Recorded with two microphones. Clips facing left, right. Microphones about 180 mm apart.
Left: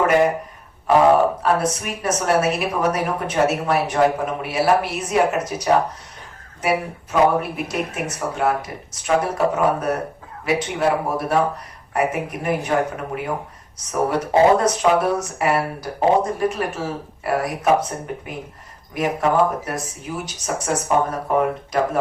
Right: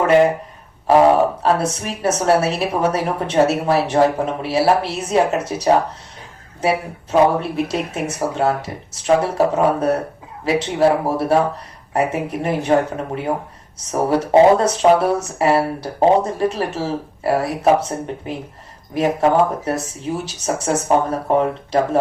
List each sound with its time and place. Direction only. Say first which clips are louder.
1.4 s speech: right 2 dB; 30° right (ahead or behind)
13.8 s speech: right 3 dB; 30° right (ahead or behind)